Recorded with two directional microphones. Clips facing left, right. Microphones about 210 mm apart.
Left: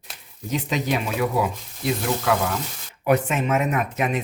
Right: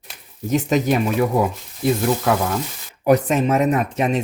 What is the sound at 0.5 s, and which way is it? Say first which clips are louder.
Speech: right 6 dB; 45° right (ahead or behind).